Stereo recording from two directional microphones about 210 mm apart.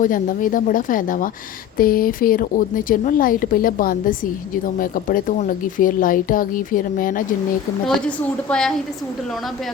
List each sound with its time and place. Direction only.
0.0 s speech: 40° left (ahead or behind)
7.9 s a woman's voice: 5° left (ahead or behind)